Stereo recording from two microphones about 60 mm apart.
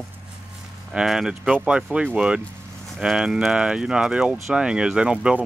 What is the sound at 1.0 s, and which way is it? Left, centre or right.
Speech, centre.